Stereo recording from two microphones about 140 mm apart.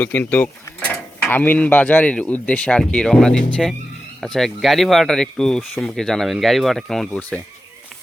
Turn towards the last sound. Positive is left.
turn(degrees=10)  # may be behind; listen again after turning